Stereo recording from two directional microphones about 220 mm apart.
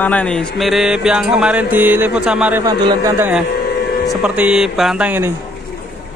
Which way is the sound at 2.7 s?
15° right (ahead or behind).